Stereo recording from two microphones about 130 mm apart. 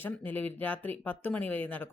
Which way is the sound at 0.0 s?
15° left (ahead or behind).